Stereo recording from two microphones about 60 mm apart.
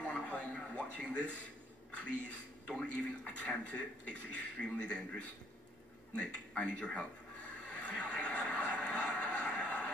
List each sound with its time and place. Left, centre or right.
0.0 s television: centre
2.8 s a man's voice: centre
6.1 s a sound: centre